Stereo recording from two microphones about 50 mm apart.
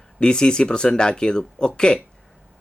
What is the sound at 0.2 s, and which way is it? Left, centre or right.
Speech, centre.